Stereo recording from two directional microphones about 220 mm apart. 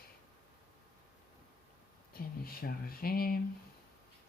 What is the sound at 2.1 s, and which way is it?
Speech, 45° left (ahead or behind).